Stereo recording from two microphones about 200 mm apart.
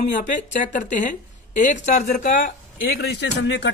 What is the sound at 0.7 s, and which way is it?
Speech, 40° left (ahead or behind).